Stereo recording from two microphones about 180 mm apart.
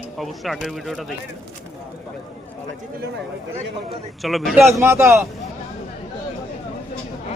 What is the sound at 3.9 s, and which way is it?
Speech, centre (ahead or behind).